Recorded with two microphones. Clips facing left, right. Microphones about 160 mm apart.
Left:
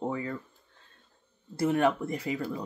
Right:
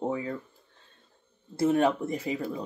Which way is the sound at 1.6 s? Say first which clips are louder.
Right 2 dB; 25° right (ahead or behind).